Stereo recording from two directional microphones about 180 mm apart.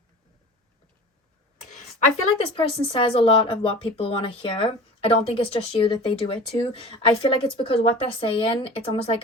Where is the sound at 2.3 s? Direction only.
35° left (ahead or behind).